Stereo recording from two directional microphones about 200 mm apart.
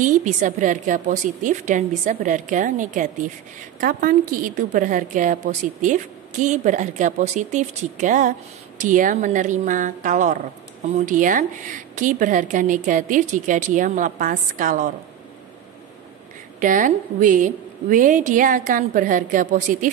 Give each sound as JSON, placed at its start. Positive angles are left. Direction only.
{"t": 0.0, "sound": "a woman's voice", "side_deg": -40}
{"t": 16.5, "sound": "a woman's voice", "side_deg": -40}